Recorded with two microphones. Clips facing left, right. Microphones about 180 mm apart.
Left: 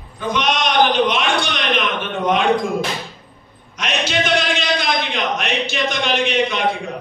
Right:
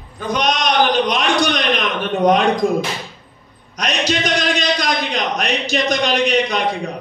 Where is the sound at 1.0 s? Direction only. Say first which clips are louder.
Right 2 dB; 40° right (ahead or behind).